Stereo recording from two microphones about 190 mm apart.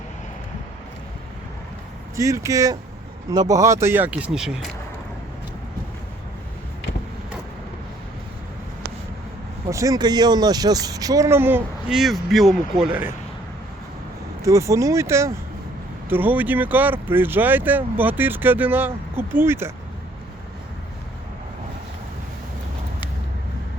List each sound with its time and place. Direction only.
2.1 s speech: 15° right (ahead or behind)
9.6 s speech: 15° right (ahead or behind)
14.4 s speech: 15° right (ahead or behind)